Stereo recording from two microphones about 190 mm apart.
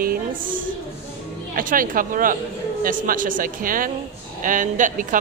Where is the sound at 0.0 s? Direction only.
45° right (ahead or behind).